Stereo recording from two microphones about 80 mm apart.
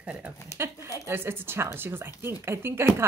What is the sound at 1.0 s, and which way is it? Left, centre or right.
Speech, right.